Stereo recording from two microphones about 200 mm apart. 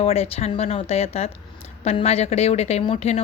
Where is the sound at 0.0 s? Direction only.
30° left (ahead or behind).